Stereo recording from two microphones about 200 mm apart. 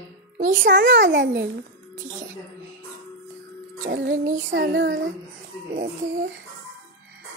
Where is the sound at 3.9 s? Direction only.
70° right (ahead or behind).